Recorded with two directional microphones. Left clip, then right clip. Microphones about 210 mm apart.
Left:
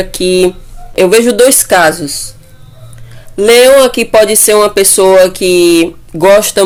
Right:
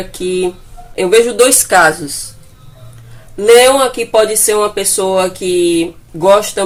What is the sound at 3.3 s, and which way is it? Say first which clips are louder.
Speech: left 3 dB; 50° left (ahead or behind).